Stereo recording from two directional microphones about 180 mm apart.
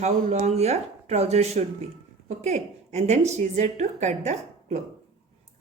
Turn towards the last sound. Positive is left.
turn(degrees=-40)  # may be behind; listen again after turning